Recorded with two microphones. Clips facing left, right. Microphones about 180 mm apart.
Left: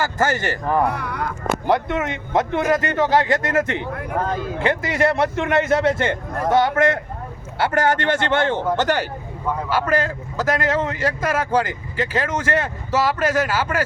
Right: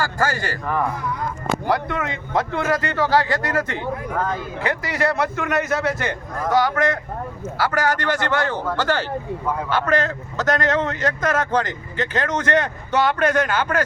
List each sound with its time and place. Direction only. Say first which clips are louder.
0.0 s a man's voice: left 2 dB; 20° left (ahead or behind)
0.9 s speech: left 1 dB; 70° left (ahead or behind)
1.6 s a man's voice: left 3 dB; 25° left (ahead or behind)
9.5 s a man's voice: left 1 dB; 10° left (ahead or behind)